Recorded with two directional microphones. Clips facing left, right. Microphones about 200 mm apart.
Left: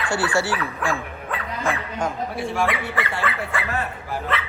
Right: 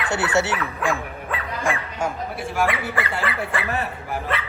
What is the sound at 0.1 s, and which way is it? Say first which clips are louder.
Speech: right 1 dB; 20° right (ahead or behind).